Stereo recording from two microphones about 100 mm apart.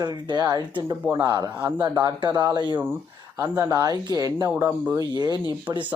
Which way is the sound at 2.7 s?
20° right (ahead or behind).